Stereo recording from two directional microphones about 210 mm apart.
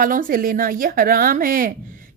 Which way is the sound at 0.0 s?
40° right (ahead or behind).